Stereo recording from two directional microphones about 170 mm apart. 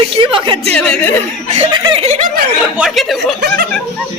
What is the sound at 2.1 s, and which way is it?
Speech, 45° right (ahead or behind).